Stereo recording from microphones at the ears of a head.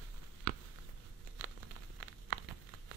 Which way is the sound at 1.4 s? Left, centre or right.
Right.